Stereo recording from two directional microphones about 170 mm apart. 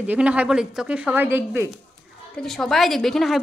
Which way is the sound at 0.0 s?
10° right (ahead or behind).